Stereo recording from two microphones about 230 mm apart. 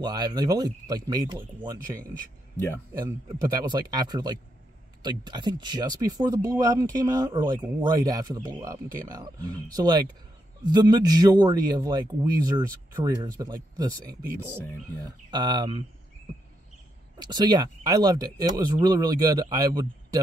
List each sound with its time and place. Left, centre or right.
0.0 s speech: centre
3.6 s speech: centre
17.2 s speech: centre